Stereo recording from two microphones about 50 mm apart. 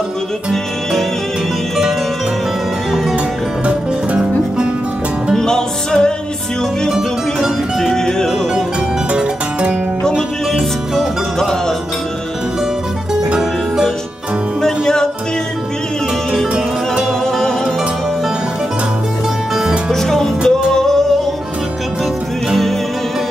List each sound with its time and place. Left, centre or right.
5.3 s music: centre
7.9 s music: centre
9.1 s music: right
11.0 s music: centre
13.4 s music: centre
14.6 s music: centre
17.2 s music: centre
19.9 s music: centre
22.5 s music: centre